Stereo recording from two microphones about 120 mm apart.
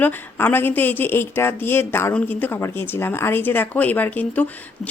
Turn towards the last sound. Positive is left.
turn(degrees=15)  # may be behind; listen again after turning